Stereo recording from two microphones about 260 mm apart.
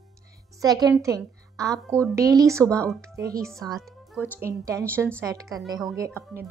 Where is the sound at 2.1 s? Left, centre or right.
Centre.